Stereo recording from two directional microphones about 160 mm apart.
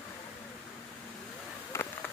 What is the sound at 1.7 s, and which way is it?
Insect, 15° left (ahead or behind).